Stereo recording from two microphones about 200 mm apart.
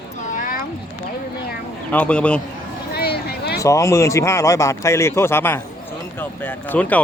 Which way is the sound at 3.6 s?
15° left (ahead or behind).